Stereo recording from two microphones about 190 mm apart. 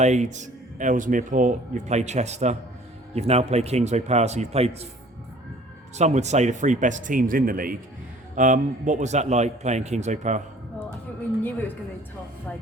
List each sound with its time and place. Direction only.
0.0 s speech: 40° right (ahead or behind)
6.0 s speech: 35° right (ahead or behind)